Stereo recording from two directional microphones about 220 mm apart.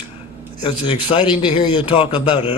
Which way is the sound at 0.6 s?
20° left (ahead or behind).